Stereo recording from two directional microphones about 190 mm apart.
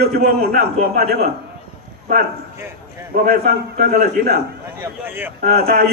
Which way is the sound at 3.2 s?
50° right (ahead or behind).